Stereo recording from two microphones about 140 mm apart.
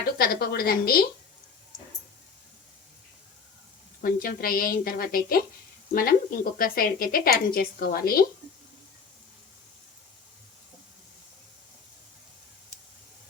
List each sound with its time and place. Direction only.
0.2 s a woman's voice: 90° left
4.0 s a woman's voice: 90° left